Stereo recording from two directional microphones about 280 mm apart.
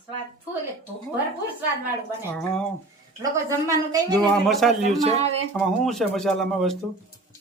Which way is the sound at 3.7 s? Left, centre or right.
Centre.